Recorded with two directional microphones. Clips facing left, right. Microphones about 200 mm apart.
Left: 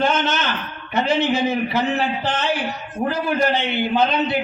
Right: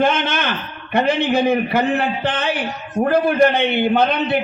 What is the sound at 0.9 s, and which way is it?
A man's voice, 55° right (ahead or behind).